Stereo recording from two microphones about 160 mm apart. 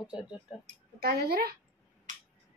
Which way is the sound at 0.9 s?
75° right (ahead or behind).